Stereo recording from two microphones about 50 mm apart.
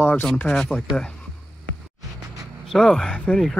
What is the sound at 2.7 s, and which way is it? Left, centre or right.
Speech, centre.